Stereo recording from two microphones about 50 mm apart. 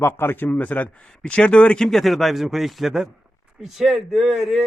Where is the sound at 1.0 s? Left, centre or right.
Centre.